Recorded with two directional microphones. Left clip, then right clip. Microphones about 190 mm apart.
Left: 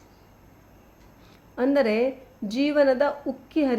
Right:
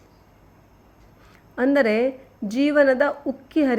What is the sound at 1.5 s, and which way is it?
A woman's voice, 15° right (ahead or behind).